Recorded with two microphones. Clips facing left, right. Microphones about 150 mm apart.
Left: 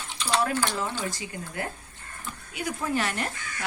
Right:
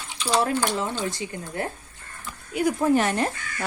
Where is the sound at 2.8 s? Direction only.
20° right (ahead or behind).